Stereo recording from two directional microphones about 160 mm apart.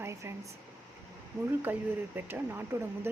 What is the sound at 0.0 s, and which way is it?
Air conditioning, 15° right (ahead or behind).